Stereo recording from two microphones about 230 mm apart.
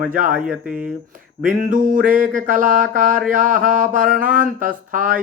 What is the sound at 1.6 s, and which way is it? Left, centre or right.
Speech, right.